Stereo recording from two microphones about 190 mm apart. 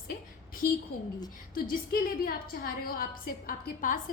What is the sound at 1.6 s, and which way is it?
A woman's voice, 50° left (ahead or behind).